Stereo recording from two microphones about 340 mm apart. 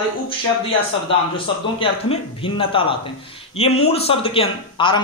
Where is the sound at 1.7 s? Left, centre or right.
Centre.